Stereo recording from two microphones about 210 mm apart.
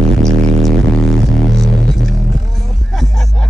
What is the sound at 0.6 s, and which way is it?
Music, centre (ahead or behind).